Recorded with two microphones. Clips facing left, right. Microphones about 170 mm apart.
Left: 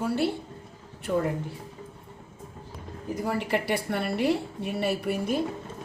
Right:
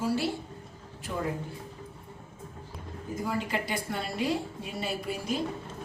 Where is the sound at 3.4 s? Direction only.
65° left (ahead or behind).